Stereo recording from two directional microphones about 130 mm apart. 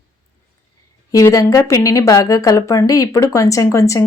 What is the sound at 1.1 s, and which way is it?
Speech, 25° left (ahead or behind).